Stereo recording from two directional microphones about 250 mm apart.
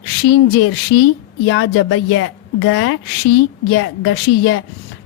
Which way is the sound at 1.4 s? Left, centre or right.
Left.